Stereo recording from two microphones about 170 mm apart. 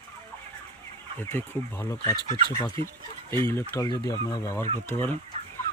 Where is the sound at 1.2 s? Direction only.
15° left (ahead or behind).